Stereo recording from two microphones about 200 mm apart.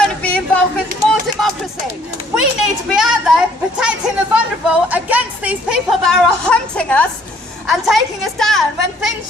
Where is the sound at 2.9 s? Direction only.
5° right (ahead or behind).